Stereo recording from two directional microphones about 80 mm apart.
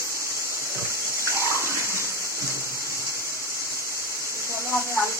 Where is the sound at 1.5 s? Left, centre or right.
Left.